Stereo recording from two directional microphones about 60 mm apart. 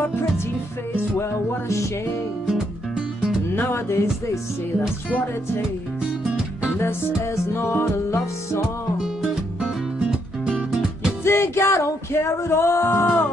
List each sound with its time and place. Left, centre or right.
3.5 s music: left
7.5 s speech: left
9.0 s music: centre
11.2 s music: left
12.1 s speech: left